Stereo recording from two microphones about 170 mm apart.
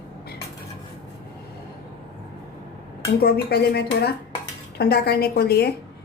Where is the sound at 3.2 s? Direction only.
70° left (ahead or behind).